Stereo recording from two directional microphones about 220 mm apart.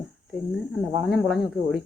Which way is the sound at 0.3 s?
Centre (ahead or behind).